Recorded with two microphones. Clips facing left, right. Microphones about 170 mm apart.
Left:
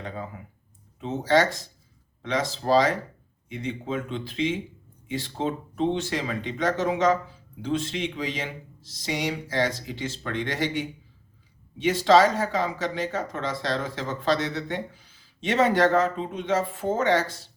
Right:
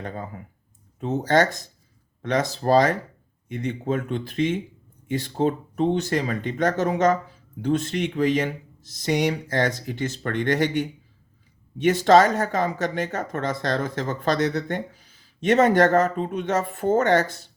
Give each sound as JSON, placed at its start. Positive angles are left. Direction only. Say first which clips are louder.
{"t": 0.0, "sound": "clicking", "louder": "right 2 dB", "side_deg": -45}
{"t": 0.9, "sound": "speech", "louder": "right 2 dB", "side_deg": -40}
{"t": 12.0, "sound": "speech", "louder": "right 2 dB", "side_deg": -50}